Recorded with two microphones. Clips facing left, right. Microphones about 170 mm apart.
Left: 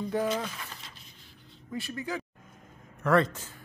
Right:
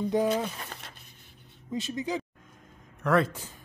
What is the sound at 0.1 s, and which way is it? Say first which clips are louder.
Speech: right 3 dB; 15° right (ahead or behind).